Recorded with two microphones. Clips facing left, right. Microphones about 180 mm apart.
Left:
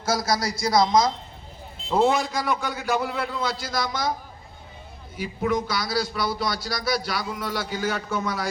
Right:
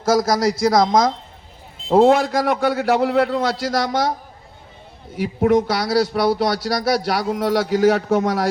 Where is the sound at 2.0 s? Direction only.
65° right (ahead or behind).